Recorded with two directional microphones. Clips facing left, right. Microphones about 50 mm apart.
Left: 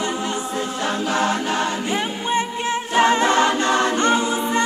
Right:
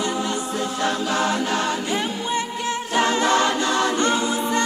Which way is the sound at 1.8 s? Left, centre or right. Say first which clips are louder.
Left 1 dB; left.